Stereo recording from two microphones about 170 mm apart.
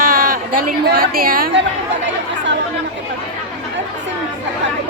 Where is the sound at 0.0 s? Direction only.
55° right (ahead or behind).